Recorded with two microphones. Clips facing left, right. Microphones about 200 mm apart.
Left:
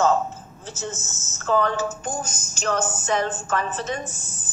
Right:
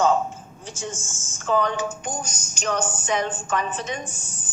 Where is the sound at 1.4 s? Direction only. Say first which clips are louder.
Left 1 dB; 15° right (ahead or behind).